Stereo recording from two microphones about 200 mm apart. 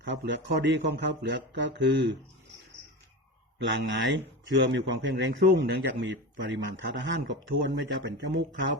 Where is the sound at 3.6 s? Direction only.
65° right (ahead or behind).